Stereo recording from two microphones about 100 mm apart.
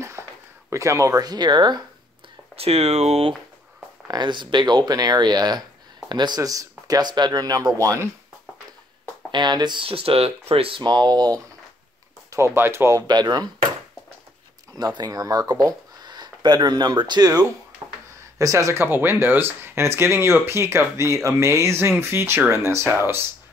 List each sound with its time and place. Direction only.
0.2 s a sound: 25° right (ahead or behind)
0.7 s speech: 30° right (ahead or behind); by 1.9 s 45° right (ahead or behind)
2.5 s speech: 90° right
4.1 s speech: 50° right (ahead or behind); by 8.1 s 30° right (ahead or behind)
9.3 s speech: 45° right (ahead or behind); by 10.8 s 70° right (ahead or behind)
10.8 s speech: 45° right (ahead or behind)
12.3 s speech: 25° right (ahead or behind)
13.0 s speech: 45° right (ahead or behind)
14.8 s speech: 40° right (ahead or behind)
18.4 s speech: 30° right (ahead or behind)